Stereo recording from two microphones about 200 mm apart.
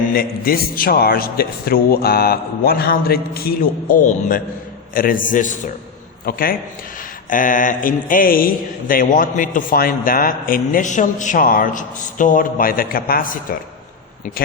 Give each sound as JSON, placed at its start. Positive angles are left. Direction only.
{"t": 0.1, "sound": "a man's voice", "side_deg": 50}